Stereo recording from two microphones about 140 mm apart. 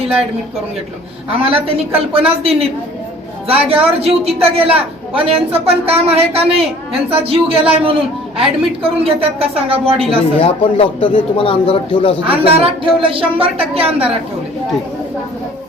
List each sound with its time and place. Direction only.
1.3 s a woman's voice: 45° right (ahead or behind)
10.3 s a man's voice: 40° left (ahead or behind)
12.2 s speech: 40° right (ahead or behind)